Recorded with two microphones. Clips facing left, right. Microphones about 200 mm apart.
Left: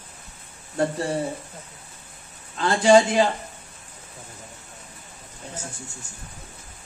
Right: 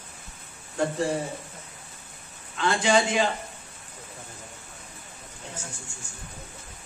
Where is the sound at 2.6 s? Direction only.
35° left (ahead or behind).